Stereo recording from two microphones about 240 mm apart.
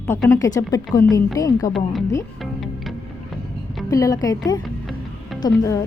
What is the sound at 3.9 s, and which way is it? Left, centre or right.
A woman's voice, centre.